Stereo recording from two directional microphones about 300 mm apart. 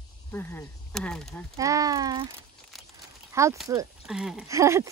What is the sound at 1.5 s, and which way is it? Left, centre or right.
Speech, centre.